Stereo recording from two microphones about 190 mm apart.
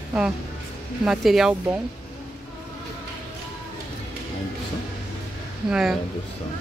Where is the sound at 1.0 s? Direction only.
Centre (ahead or behind).